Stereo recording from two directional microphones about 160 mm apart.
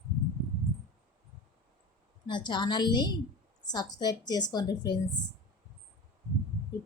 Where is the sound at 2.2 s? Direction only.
30° left (ahead or behind).